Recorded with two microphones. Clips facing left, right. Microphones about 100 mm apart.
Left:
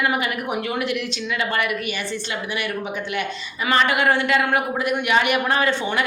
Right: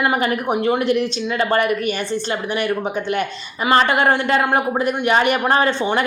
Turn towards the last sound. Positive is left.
turn(degrees=-30)  # may be behind; listen again after turning